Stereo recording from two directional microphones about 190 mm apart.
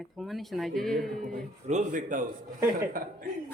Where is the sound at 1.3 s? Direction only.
40° right (ahead or behind).